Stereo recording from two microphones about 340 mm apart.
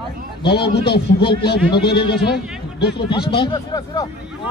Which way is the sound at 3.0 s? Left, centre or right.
Centre.